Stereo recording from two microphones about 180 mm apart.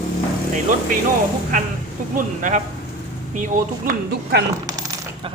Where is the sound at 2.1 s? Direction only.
45° right (ahead or behind).